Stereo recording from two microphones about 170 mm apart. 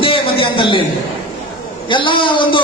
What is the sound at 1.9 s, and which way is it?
Speech, 30° left (ahead or behind).